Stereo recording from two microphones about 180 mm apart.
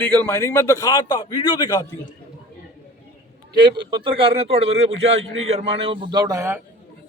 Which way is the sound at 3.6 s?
25° right (ahead or behind).